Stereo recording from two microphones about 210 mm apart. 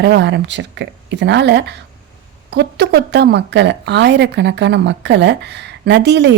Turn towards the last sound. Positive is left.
turn(degrees=-55)  # may be behind; listen again after turning